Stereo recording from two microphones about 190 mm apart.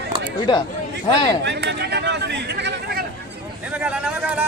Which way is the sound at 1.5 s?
60° right (ahead or behind).